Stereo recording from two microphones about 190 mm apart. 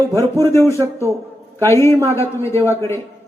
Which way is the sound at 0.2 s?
15° left (ahead or behind).